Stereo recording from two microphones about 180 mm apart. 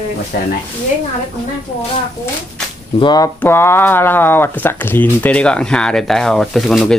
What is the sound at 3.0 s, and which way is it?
Speech, 20° left (ahead or behind).